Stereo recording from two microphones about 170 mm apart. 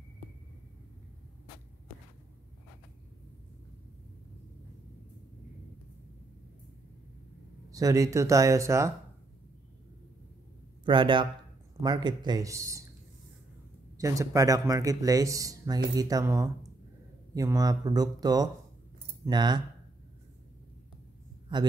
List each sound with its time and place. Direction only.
7.7 s speech: 20° right (ahead or behind)
10.9 s speech: 30° right (ahead or behind)
13.9 s speech: 20° right (ahead or behind)